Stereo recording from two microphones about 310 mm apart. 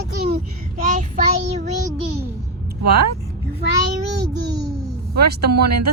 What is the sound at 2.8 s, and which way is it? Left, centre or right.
Speech, right.